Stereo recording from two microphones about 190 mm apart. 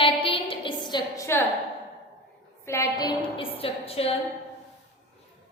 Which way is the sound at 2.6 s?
15° left (ahead or behind).